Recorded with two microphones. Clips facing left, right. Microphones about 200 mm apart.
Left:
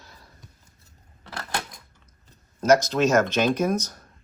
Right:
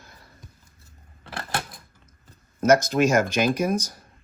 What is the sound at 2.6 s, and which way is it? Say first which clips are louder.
Speech: even; 55° right (ahead or behind).